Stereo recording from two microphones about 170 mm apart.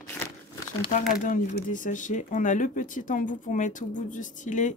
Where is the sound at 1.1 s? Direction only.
50° left (ahead or behind).